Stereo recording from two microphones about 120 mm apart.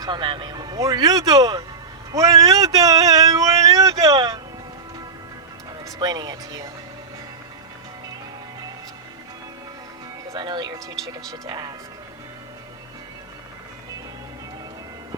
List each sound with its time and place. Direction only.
0.0 s speech: 40° right (ahead or behind)
2.1 s a sound: 30° right (ahead or behind)
5.8 s speech: 35° right (ahead or behind)
10.2 s speech: 40° right (ahead or behind)